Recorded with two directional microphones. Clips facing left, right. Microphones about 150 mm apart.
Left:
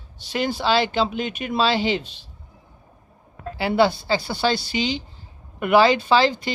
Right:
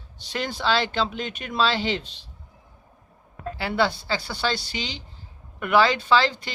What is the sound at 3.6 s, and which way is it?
Speech, 15° left (ahead or behind).